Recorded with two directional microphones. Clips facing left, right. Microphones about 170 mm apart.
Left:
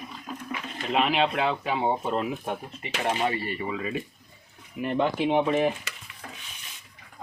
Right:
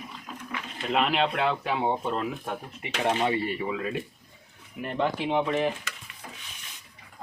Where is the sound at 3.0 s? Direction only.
25° right (ahead or behind).